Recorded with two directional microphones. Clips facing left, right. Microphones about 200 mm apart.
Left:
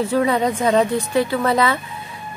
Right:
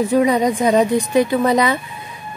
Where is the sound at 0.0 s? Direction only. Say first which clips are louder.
Right 3 dB; 15° right (ahead or behind).